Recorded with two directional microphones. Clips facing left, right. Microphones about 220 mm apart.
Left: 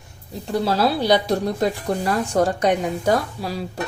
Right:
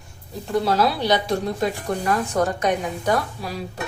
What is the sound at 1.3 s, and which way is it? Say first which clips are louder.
A woman's voice: left 2 dB; 35° left (ahead or behind).